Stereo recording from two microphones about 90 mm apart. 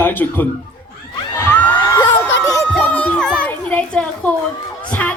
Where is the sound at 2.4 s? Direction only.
35° left (ahead or behind).